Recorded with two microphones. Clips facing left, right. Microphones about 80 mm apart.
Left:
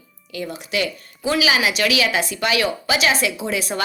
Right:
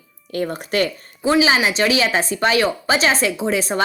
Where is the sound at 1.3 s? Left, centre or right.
Right.